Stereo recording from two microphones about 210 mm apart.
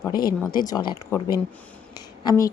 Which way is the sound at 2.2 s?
20° left (ahead or behind).